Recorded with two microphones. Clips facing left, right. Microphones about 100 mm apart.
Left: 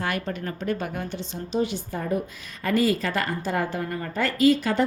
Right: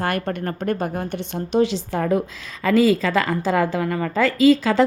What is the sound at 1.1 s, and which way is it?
A woman's voice, 65° right (ahead or behind).